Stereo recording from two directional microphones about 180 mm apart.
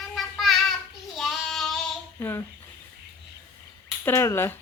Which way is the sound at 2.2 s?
10° left (ahead or behind).